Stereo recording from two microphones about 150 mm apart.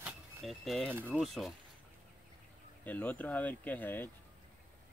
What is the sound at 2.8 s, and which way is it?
Speech, 10° left (ahead or behind).